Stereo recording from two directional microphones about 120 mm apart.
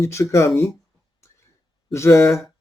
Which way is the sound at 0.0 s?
25° left (ahead or behind).